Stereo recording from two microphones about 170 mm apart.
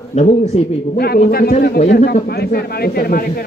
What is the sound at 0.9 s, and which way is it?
Speech, 65° left (ahead or behind).